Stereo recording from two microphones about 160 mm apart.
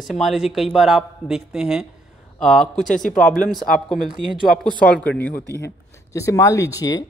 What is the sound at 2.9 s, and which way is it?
Speech, 55° left (ahead or behind).